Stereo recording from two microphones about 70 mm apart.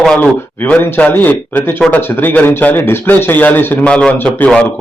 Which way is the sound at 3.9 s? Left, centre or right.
Centre.